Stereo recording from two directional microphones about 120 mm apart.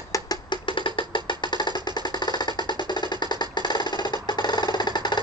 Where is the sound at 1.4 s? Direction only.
40° left (ahead or behind).